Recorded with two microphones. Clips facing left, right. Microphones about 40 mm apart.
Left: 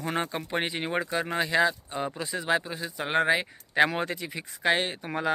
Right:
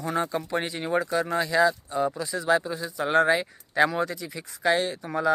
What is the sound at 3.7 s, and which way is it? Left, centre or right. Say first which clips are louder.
Speech: right 1 dB; left.